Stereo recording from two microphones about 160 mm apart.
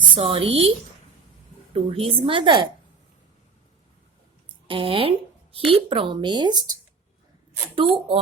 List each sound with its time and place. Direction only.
0.2 s a woman's voice: 35° right (ahead or behind)
1.7 s a woman's voice: 35° right (ahead or behind)
4.4 s speech: 35° right (ahead or behind)
7.8 s a woman's voice: 30° right (ahead or behind)